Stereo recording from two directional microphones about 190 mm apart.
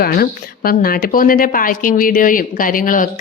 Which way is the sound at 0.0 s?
50° left (ahead or behind).